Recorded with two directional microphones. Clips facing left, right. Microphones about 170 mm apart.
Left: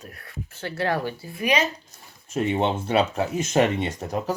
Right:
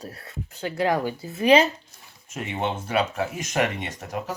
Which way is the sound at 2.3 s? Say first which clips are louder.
Left 5 dB; 30° left (ahead or behind).